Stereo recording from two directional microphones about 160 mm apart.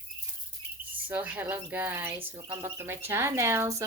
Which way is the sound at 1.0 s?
10° right (ahead or behind).